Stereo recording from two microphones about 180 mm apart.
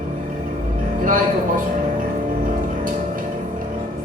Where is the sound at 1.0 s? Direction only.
50° right (ahead or behind).